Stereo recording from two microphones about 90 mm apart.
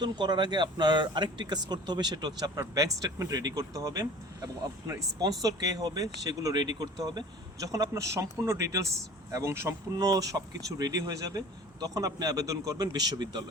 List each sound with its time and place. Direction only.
0.0 s speech: 55° right (ahead or behind)
2.6 s speech: 40° right (ahead or behind)
7.6 s speech: 40° right (ahead or behind)
10.1 s speech: 45° right (ahead or behind)